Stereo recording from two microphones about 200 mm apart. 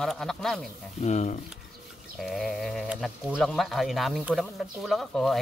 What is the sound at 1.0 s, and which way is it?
Speech, 35° left (ahead or behind).